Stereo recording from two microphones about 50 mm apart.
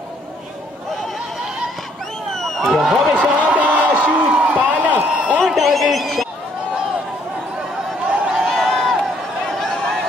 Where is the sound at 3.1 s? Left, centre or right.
Right.